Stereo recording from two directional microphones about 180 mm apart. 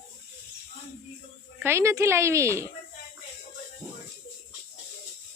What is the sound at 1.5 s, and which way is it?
Speech, 15° right (ahead or behind).